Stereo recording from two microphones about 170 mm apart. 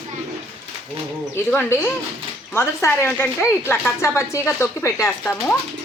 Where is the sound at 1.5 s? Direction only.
15° left (ahead or behind).